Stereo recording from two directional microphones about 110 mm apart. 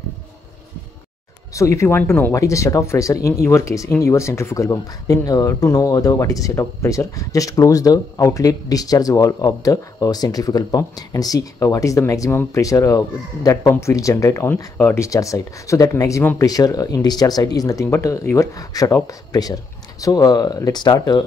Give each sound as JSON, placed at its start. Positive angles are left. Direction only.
{"t": 1.5, "sound": "speech", "side_deg": 30}
{"t": 2.3, "sound": "speech", "side_deg": 30}